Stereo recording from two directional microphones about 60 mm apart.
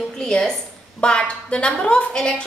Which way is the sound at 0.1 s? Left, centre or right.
Centre.